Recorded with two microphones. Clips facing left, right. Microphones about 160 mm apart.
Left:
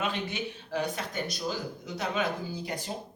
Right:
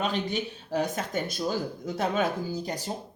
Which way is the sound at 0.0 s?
35° right (ahead or behind).